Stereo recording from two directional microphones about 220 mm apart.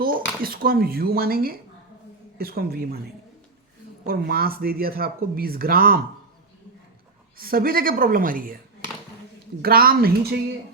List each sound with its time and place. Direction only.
0.0 s speech: 40° right (ahead or behind)
4.0 s speech: 45° right (ahead or behind)
7.3 s a woman's voice: 40° right (ahead or behind)
9.6 s speech: 40° right (ahead or behind)